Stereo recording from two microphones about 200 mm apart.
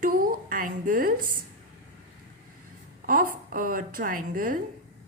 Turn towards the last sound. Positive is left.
turn(degrees=-45)  # may be behind; listen again after turning